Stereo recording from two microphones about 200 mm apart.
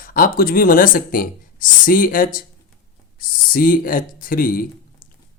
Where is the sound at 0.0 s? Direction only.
45° left (ahead or behind).